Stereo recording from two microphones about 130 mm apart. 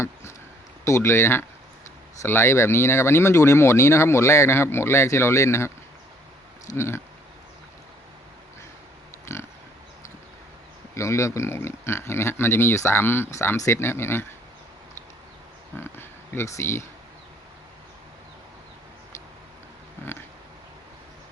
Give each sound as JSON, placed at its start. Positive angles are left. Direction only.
{"t": 0.0, "sound": "a sound", "side_deg": 20}
{"t": 0.9, "sound": "speech", "side_deg": 20}
{"t": 6.7, "sound": "speech", "side_deg": 20}
{"t": 9.2, "sound": "pig", "side_deg": 20}
{"t": 10.9, "sound": "speech", "side_deg": 20}
{"t": 15.8, "sound": "speech", "side_deg": 20}